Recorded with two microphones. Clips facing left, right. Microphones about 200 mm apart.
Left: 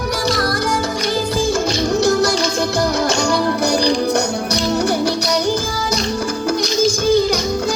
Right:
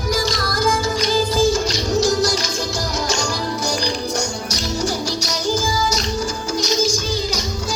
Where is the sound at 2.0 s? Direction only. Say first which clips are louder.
Left 2 dB; 60° left (ahead or behind).